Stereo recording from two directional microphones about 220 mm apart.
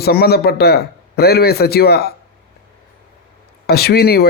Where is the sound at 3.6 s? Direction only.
45° left (ahead or behind).